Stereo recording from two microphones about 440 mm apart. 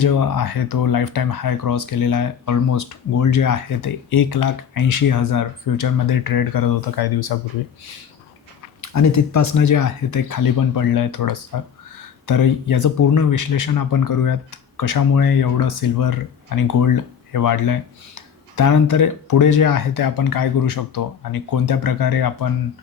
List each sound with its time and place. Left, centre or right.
0.0 s speech: left
8.8 s speech: left